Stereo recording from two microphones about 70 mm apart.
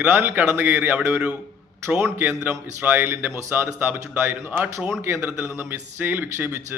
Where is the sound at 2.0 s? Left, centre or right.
Right.